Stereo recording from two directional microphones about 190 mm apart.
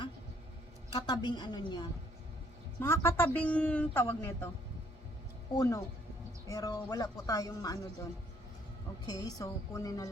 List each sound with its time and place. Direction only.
0.9 s a woman's voice: 20° left (ahead or behind)
5.5 s a woman's voice: 15° left (ahead or behind)
9.0 s speech: 20° left (ahead or behind)